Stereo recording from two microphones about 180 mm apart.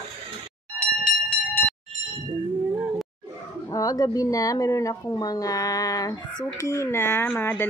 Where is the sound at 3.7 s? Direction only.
20° left (ahead or behind).